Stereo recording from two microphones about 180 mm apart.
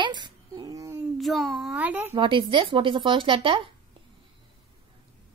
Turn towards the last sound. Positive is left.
turn(degrees=-30)  # may be behind; listen again after turning